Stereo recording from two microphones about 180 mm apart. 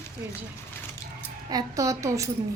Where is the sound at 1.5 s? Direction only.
20° right (ahead or behind).